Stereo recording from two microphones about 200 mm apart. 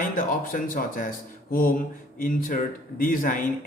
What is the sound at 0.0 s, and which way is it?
A man's voice, 40° left (ahead or behind).